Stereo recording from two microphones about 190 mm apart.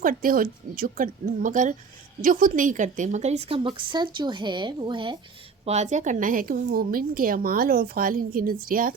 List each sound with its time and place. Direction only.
0.0 s a woman's voice: 45° right (ahead or behind); by 5.1 s 25° right (ahead or behind)
5.6 s a woman's voice: 35° right (ahead or behind)